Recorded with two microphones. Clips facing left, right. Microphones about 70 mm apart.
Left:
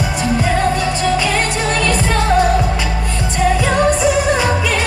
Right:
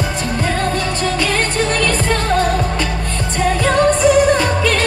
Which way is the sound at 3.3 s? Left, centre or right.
Centre.